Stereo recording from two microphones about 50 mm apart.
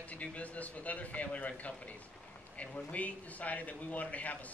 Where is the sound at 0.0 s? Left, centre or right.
Left.